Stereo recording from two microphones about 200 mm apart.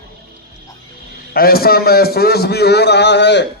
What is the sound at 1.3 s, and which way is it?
A man's voice, 50° left (ahead or behind).